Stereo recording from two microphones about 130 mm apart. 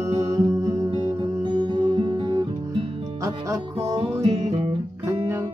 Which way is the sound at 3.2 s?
25° right (ahead or behind).